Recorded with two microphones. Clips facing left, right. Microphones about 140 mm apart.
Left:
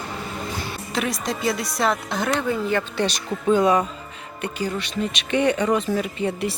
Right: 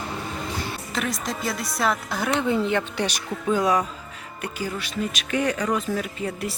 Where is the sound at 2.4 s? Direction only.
25° right (ahead or behind).